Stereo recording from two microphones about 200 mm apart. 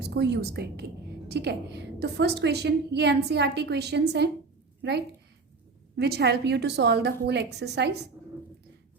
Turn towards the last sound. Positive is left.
turn(degrees=-60)  # may be behind; listen again after turning